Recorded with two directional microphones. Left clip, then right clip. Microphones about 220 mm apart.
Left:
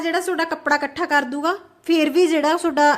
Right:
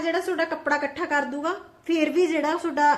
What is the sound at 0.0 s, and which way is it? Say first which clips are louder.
A woman's voice: left 3 dB; 45° left (ahead or behind).